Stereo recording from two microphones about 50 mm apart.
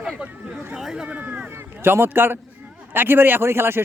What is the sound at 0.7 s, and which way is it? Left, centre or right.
Speech, centre.